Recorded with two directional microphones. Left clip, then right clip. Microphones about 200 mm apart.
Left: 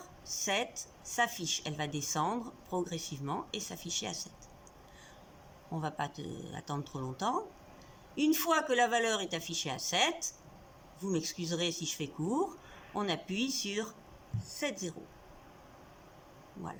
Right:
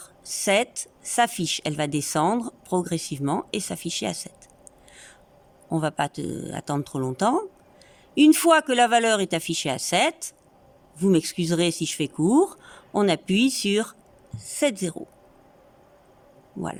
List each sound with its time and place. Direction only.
0.3 s speech: 55° right (ahead or behind)
5.7 s a woman's voice: 50° right (ahead or behind)